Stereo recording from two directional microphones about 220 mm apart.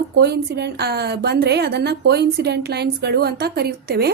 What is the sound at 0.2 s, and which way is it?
A woman's voice, 50° right (ahead or behind).